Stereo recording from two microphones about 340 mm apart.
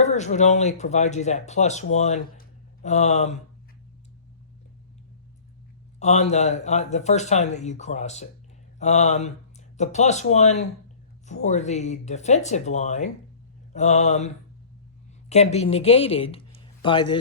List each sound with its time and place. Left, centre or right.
0.0 s speech: centre
6.0 s speech: centre